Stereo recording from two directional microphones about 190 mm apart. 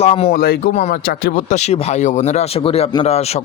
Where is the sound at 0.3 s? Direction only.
55° left (ahead or behind).